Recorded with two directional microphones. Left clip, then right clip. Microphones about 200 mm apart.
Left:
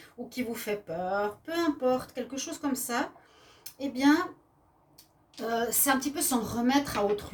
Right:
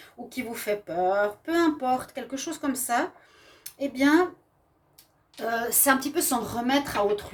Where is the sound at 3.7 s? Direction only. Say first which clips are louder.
Right 2 dB; 45° right (ahead or behind).